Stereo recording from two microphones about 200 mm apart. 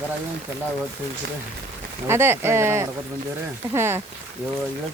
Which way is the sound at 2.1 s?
10° right (ahead or behind).